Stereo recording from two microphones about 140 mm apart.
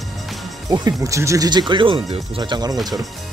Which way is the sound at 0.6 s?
25° right (ahead or behind).